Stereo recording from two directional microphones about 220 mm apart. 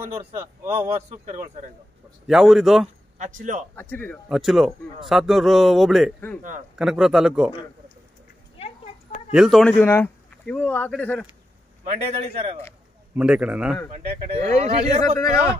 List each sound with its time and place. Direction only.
0.0 s speech: 10° right (ahead or behind)
0.7 s a man's voice: 30° right (ahead or behind)
2.2 s a man's voice: centre (ahead or behind)
3.2 s a man's voice: 35° right (ahead or behind)
3.7 s a man's voice: 10° left (ahead or behind)
8.5 s a sound: 25° left (ahead or behind)
9.3 s a man's voice: centre (ahead or behind)
11.8 s a man's voice: 30° right (ahead or behind)
13.1 s a man's voice: 5° right (ahead or behind)
13.9 s a man's voice: 30° right (ahead or behind)